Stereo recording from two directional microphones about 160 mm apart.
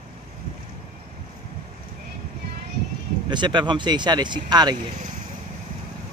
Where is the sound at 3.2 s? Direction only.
30° right (ahead or behind).